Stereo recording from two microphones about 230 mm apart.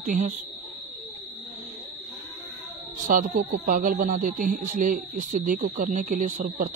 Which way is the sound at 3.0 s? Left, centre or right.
Right.